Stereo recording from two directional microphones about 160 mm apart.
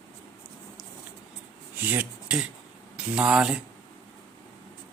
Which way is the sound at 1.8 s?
10° right (ahead or behind).